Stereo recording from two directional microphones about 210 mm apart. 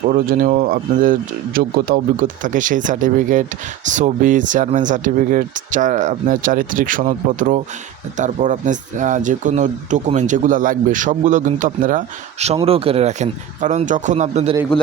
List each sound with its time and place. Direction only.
0.0 s speech: 40° right (ahead or behind)